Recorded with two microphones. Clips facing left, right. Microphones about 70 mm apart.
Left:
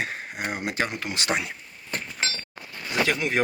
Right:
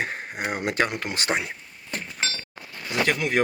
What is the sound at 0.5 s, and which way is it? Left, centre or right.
Speech, right.